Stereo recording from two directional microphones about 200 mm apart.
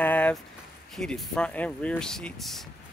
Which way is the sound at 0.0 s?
5° left (ahead or behind).